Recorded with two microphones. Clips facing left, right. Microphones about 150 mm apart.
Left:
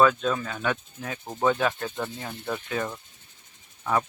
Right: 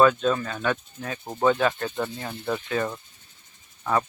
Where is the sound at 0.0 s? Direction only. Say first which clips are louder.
Right 2 dB; centre (ahead or behind).